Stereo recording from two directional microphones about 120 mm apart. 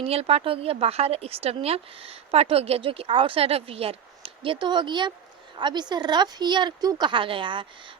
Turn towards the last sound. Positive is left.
turn(degrees=-45)  # may be behind; listen again after turning